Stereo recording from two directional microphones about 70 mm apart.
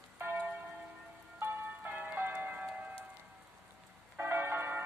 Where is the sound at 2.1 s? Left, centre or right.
Right.